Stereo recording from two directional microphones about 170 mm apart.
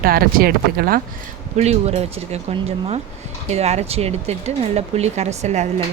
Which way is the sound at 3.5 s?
40° right (ahead or behind).